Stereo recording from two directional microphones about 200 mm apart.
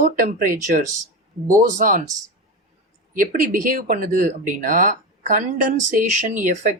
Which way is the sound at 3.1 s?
45° right (ahead or behind).